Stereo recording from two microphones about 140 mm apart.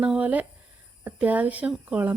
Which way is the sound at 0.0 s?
10° right (ahead or behind).